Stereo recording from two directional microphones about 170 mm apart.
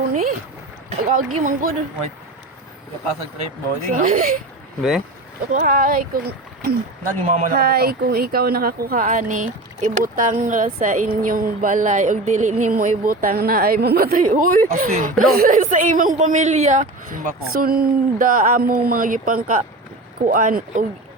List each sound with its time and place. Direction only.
0.1 s speech: 50° right (ahead or behind)
3.8 s speech: 50° right (ahead or behind)
4.8 s speech: centre (ahead or behind)
5.5 s speech: 55° right (ahead or behind)
7.3 s speech: 50° right (ahead or behind)